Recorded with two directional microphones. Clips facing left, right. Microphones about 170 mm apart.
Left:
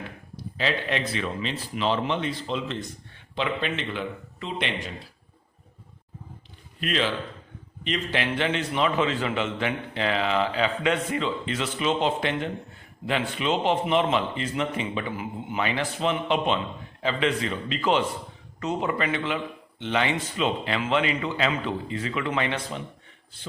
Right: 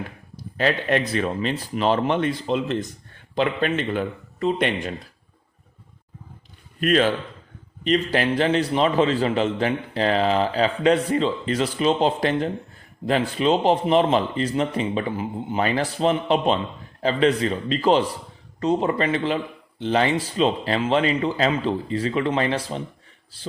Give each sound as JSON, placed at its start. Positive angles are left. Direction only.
{"t": 0.3, "sound": "speech", "side_deg": -50}
{"t": 6.7, "sound": "a man's voice", "side_deg": -45}